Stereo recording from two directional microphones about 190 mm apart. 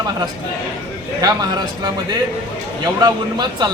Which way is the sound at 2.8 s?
20° right (ahead or behind).